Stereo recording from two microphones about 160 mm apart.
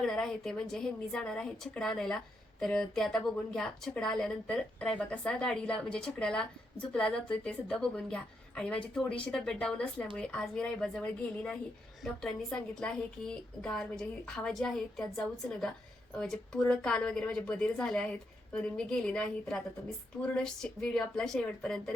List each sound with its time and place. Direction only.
0.0 s a woman's voice: 5° left (ahead or behind)